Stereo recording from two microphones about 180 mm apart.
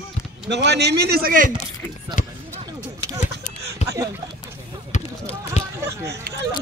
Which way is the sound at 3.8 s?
40° left (ahead or behind).